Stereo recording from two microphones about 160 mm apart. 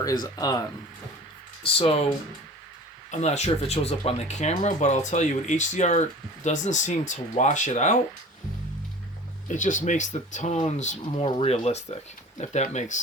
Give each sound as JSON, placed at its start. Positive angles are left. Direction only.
{"t": 0.0, "sound": "speech", "side_deg": 25}
{"t": 1.8, "sound": "speech", "side_deg": 35}
{"t": 3.1, "sound": "speech", "side_deg": 45}
{"t": 9.5, "sound": "speech", "side_deg": 55}
{"t": 11.3, "sound": "speech", "side_deg": 35}